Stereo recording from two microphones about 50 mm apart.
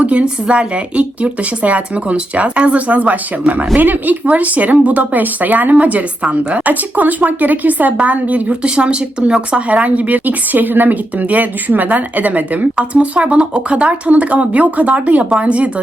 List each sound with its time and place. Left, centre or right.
0.0 s speech: right